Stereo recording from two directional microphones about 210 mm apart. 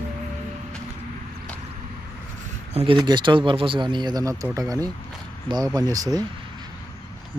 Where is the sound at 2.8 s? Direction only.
25° right (ahead or behind).